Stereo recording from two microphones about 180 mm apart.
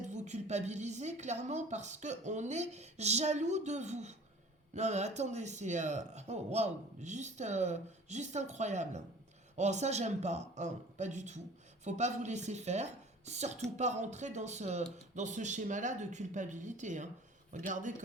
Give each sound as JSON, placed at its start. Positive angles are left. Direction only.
{"t": 0.1, "sound": "speech", "side_deg": -40}